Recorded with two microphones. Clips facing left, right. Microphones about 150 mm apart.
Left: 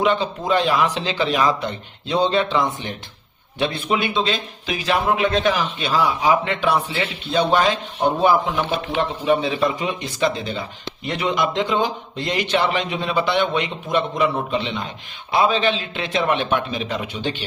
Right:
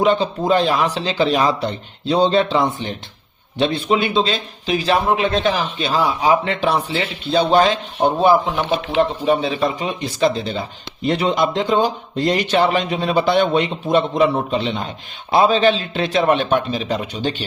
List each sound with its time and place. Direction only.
0.0 s a man's voice: 35° right (ahead or behind)
9.0 s a man's voice: 35° right (ahead or behind)